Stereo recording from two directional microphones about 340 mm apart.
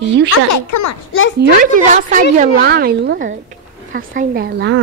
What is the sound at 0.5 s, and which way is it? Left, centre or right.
Speech, left.